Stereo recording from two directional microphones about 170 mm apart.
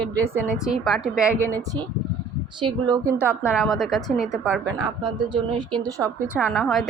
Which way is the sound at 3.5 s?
Centre (ahead or behind).